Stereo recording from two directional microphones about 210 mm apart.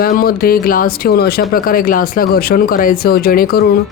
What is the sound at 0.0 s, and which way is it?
Speech, 45° left (ahead or behind).